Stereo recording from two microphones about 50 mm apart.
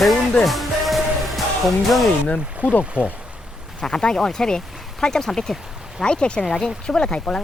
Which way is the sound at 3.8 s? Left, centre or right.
Centre.